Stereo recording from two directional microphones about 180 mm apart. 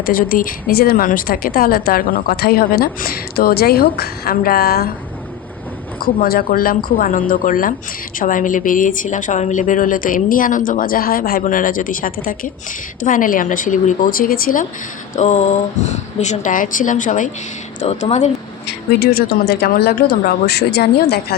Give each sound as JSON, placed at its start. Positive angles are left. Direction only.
{"t": 0.0, "sound": "a woman's voice", "side_deg": 50}
{"t": 6.1, "sound": "a woman's voice", "side_deg": 55}
{"t": 15.1, "sound": "speech", "side_deg": 40}
{"t": 18.9, "sound": "a woman's voice", "side_deg": 60}